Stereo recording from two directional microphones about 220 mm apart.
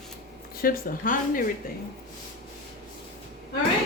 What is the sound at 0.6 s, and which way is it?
Speech, 40° left (ahead or behind).